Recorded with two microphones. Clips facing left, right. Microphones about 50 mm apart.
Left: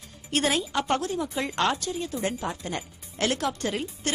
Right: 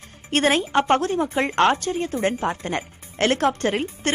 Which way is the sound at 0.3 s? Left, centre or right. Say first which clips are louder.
Right 6 dB; right.